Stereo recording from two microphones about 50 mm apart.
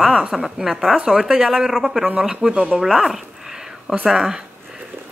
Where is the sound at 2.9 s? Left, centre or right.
Centre.